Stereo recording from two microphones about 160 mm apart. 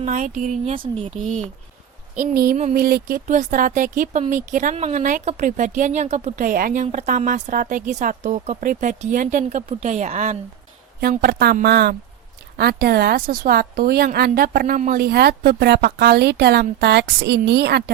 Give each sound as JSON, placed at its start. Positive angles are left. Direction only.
{"t": 0.0, "sound": "speech", "side_deg": -50}
{"t": 2.1, "sound": "a woman's voice", "side_deg": -65}
{"t": 6.8, "sound": "speech", "side_deg": -45}
{"t": 11.0, "sound": "a woman's voice", "side_deg": -65}